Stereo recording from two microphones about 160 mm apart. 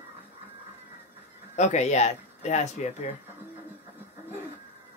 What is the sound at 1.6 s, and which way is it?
Speech, 45° left (ahead or behind).